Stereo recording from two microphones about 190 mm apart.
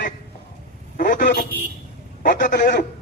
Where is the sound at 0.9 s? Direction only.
45° left (ahead or behind).